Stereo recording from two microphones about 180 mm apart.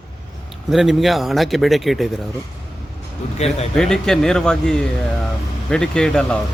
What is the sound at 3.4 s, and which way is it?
Speech, 40° left (ahead or behind).